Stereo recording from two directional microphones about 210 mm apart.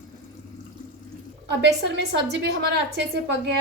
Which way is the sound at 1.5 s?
55° right (ahead or behind).